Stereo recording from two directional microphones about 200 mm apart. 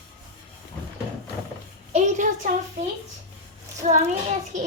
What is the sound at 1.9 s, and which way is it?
Child singing, 35° right (ahead or behind).